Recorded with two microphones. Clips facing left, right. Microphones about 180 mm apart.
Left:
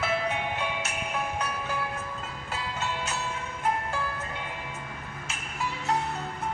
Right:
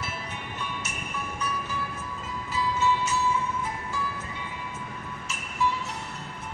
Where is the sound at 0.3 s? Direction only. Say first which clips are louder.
Left 6 dB; 90° left.